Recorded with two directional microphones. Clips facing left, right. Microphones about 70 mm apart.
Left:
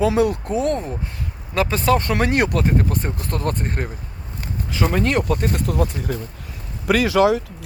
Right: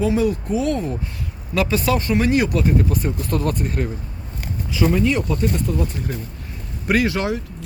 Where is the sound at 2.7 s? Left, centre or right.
Left.